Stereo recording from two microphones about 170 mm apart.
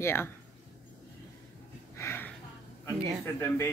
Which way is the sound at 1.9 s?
15° left (ahead or behind).